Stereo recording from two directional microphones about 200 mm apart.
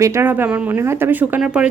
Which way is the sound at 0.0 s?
15° right (ahead or behind).